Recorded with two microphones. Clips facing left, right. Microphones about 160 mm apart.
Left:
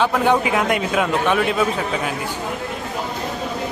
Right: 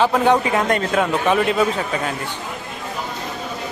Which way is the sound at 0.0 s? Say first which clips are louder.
Right 1 dB; centre (ahead or behind).